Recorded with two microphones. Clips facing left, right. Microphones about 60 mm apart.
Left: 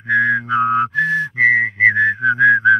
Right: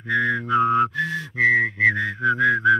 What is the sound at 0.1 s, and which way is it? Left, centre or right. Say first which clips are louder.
Whistling: left 5 dB; left.